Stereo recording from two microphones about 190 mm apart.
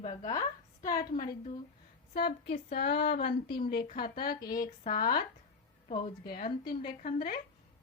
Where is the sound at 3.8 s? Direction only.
50° left (ahead or behind).